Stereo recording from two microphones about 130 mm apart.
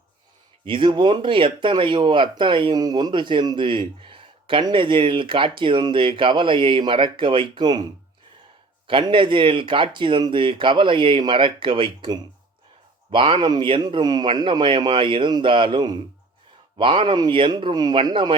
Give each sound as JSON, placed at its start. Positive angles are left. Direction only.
{"t": 0.6, "sound": "speech", "side_deg": -40}
{"t": 8.9, "sound": "speech", "side_deg": -40}